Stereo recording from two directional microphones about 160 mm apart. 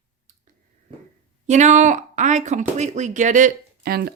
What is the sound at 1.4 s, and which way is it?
Speech, 50° right (ahead or behind).